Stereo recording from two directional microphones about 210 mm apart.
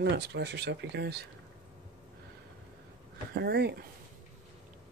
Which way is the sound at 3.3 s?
50° right (ahead or behind).